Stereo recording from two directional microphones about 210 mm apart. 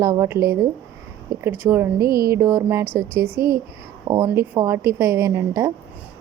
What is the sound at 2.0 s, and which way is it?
Music, 45° right (ahead or behind).